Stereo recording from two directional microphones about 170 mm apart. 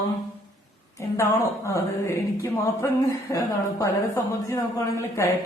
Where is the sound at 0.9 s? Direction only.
20° left (ahead or behind).